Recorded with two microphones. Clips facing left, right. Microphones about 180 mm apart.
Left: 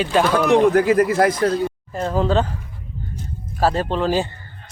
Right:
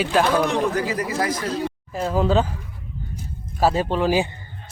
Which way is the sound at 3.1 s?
10° right (ahead or behind).